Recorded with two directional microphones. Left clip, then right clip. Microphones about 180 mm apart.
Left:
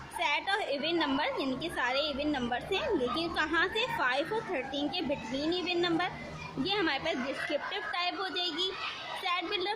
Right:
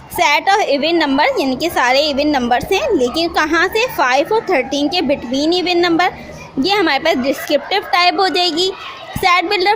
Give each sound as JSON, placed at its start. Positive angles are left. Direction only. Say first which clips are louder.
{"t": 0.2, "sound": "a woman's voice", "louder": "right 18 dB", "side_deg": -40}